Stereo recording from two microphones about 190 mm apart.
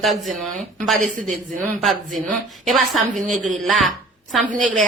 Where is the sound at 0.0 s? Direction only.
Centre (ahead or behind).